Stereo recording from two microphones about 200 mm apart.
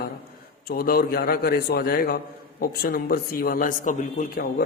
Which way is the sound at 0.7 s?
50° left (ahead or behind).